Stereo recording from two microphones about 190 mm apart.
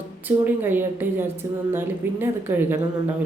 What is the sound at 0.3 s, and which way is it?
Speech, 10° right (ahead or behind).